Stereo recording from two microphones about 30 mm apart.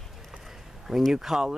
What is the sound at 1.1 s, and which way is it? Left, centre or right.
Speech, centre.